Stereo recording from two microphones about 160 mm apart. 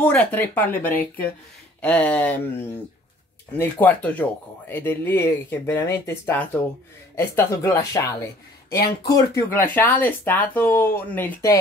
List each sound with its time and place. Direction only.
0.0 s speech: 10° left (ahead or behind)
3.5 s speech: 15° left (ahead or behind)